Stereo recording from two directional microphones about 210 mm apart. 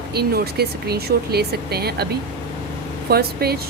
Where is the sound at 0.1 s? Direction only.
50° right (ahead or behind).